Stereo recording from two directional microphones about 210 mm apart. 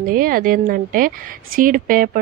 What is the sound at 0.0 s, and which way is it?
Speech, 45° right (ahead or behind).